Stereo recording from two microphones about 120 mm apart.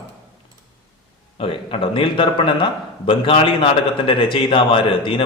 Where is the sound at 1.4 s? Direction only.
50° left (ahead or behind).